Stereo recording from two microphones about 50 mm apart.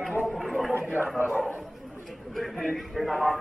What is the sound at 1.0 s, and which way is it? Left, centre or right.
Bow-wow, left.